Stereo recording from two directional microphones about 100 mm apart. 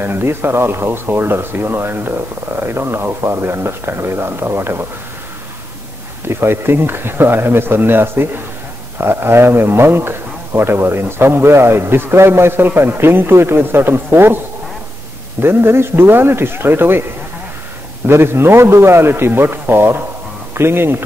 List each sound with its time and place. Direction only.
0.0 s speech: 25° right (ahead or behind)
6.2 s speech: 25° right (ahead or behind)
15.4 s speech: 25° right (ahead or behind)
18.0 s speech: 25° right (ahead or behind)